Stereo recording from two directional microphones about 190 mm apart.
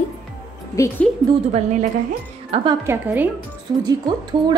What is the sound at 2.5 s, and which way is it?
Speech, 30° right (ahead or behind).